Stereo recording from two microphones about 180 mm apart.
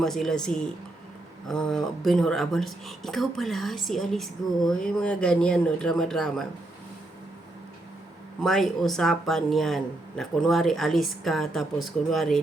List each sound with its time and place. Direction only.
0.0 s speech: centre (ahead or behind)
8.4 s speech: centre (ahead or behind)